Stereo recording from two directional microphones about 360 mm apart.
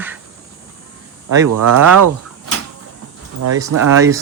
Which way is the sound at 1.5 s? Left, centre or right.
Right.